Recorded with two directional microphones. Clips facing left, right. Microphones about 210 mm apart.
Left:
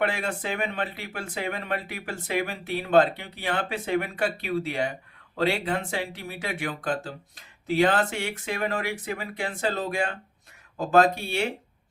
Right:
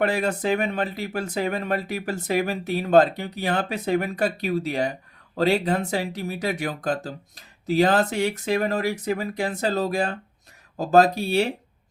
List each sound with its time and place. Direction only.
0.0 s speech: 40° right (ahead or behind)